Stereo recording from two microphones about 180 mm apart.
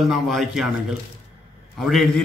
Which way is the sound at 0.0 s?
Centre (ahead or behind).